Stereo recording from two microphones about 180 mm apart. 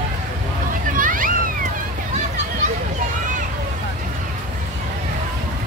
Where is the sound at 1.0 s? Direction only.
50° right (ahead or behind).